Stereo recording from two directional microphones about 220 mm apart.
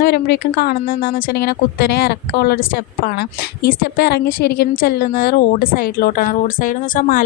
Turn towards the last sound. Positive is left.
turn(degrees=40)  # may be behind; listen again after turning